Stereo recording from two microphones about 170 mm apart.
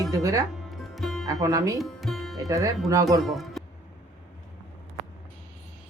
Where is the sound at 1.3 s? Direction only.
20° right (ahead or behind).